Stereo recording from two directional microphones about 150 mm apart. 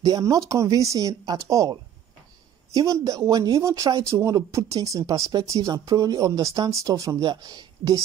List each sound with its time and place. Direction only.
0.0 s speech: 25° right (ahead or behind)